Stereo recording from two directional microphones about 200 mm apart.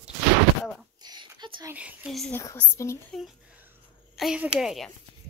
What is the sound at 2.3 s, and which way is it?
Speech, 15° left (ahead or behind).